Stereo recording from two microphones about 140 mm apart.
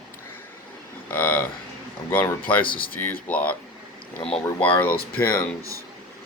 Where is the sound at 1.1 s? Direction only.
10° left (ahead or behind).